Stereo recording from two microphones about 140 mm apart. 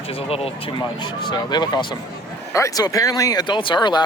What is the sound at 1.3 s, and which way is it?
Speech, 30° left (ahead or behind).